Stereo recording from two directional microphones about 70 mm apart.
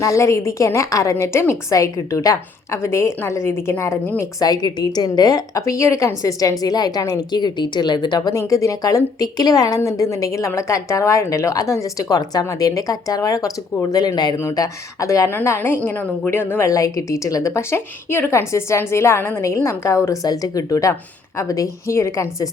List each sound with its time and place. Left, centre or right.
0.0 s a woman's voice: left
1.7 s a woman's voice: left
4.4 s a woman's voice: left
8.3 s a woman's voice: left
12.5 s speech: left
13.9 s a woman's voice: left
14.5 s a woman's voice: left
15.3 s a woman's voice: left
16.6 s a woman's voice: left
20.2 s a woman's voice: left